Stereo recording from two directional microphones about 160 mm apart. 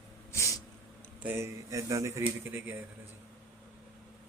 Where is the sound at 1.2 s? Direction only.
15° right (ahead or behind).